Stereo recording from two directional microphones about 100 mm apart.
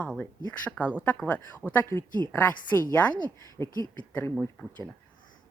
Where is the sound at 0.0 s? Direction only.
15° left (ahead or behind).